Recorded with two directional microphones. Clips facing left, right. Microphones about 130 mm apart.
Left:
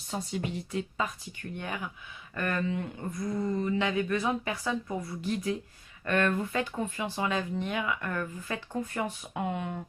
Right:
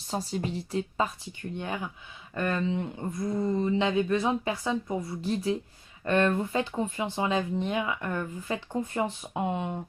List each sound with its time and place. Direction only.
0.1 s a woman's voice: 35° right (ahead or behind)
3.0 s a sound: 15° right (ahead or behind)
3.4 s speech: 25° right (ahead or behind)